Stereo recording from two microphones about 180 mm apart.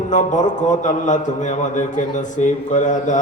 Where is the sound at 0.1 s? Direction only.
45° left (ahead or behind).